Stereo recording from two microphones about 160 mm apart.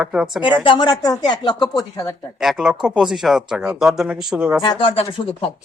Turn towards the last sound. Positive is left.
turn(degrees=35)  # may be behind; listen again after turning